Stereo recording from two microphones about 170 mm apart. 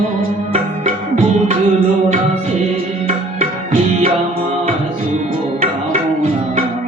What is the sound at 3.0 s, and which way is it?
Music, 50° right (ahead or behind).